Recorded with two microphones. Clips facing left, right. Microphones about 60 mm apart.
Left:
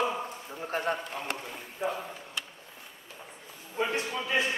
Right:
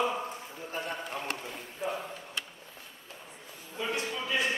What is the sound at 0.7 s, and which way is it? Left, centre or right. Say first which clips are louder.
Speech: left 6 dB; left.